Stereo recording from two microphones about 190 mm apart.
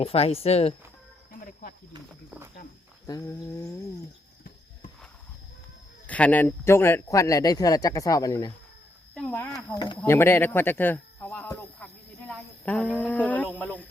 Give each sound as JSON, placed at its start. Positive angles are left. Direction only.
{"t": 0.0, "sound": "speech", "side_deg": 30}
{"t": 3.1, "sound": "speech", "side_deg": 20}
{"t": 6.1, "sound": "speech", "side_deg": 5}
{"t": 9.1, "sound": "speech", "side_deg": 10}
{"t": 9.7, "sound": "speech", "side_deg": 20}
{"t": 10.0, "sound": "a sound", "side_deg": 10}
{"t": 12.3, "sound": "speech", "side_deg": 5}